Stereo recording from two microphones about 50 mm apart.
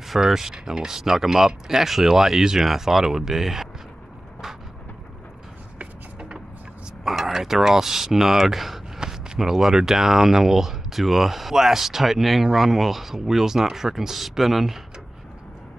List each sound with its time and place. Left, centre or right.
0.1 s speech: centre
5.8 s music: right
7.1 s speech: centre